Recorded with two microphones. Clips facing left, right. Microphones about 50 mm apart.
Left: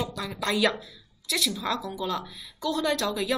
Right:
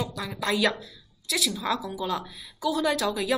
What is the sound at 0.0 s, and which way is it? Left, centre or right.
A woman's voice, centre.